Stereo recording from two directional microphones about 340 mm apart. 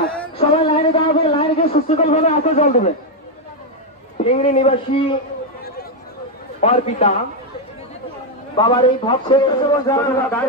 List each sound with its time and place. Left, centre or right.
0.4 s a sound: centre
4.2 s a man's voice: centre
6.6 s a man's voice: centre
8.5 s a man's voice: centre